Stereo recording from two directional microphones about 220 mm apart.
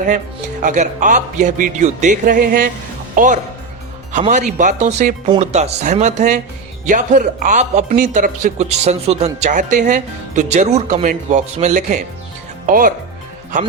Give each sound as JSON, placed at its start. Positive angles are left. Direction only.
{"t": 0.6, "sound": "speech", "side_deg": -35}